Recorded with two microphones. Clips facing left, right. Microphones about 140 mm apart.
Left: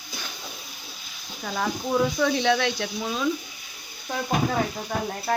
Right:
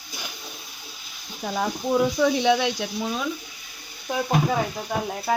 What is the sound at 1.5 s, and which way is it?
Speech, 10° right (ahead or behind).